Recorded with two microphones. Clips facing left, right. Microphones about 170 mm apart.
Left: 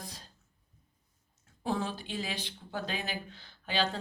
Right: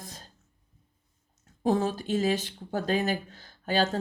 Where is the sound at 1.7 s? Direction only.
40° right (ahead or behind).